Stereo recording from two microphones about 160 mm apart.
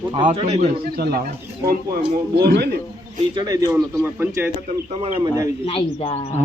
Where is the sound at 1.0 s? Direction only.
80° right.